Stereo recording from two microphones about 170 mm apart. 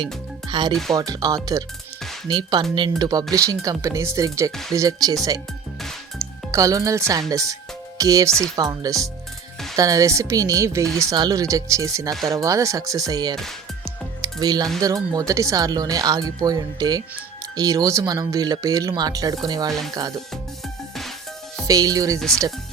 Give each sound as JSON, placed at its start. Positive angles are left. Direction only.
{"t": 0.4, "sound": "music", "side_deg": -25}
{"t": 0.7, "sound": "speech", "side_deg": 0}
{"t": 0.9, "sound": "speech", "side_deg": -20}
{"t": 13.3, "sound": "music", "side_deg": 0}
{"t": 14.4, "sound": "speech", "side_deg": -25}
{"t": 21.7, "sound": "speech", "side_deg": -20}